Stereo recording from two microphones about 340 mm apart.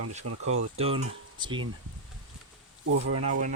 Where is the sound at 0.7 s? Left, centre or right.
Centre.